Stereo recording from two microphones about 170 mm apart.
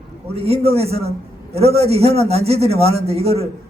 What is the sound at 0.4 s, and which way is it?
A man's voice, 35° right (ahead or behind).